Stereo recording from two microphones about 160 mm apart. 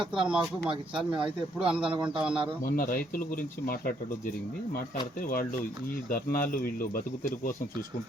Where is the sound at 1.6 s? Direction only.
5° right (ahead or behind).